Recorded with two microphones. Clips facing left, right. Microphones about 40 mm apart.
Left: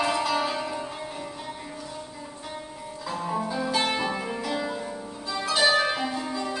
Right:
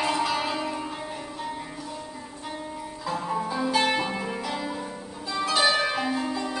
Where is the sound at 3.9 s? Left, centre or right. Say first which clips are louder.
Right 1 dB; centre.